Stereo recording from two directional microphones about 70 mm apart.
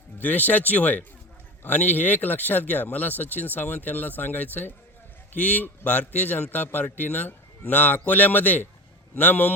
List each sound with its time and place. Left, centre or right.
0.2 s speech: left